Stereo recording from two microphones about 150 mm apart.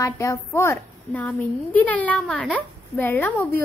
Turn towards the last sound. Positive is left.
turn(degrees=15)  # may be behind; listen again after turning